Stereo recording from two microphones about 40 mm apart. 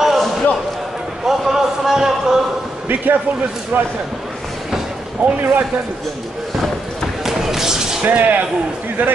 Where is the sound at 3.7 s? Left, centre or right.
Right.